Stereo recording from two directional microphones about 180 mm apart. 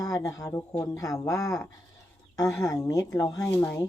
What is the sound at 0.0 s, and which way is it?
Speech, 20° left (ahead or behind).